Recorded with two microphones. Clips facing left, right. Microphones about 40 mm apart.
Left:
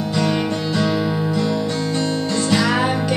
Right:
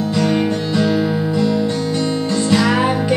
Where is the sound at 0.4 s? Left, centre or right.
Centre.